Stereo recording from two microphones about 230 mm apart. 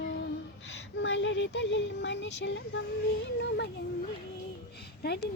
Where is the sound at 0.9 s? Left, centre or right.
Left.